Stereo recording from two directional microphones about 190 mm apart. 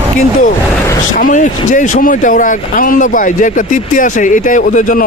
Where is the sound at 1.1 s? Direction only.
45° left (ahead or behind).